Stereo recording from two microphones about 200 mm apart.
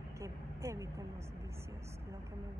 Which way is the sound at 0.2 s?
15° right (ahead or behind).